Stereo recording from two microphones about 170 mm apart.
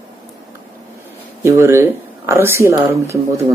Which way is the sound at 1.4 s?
15° right (ahead or behind).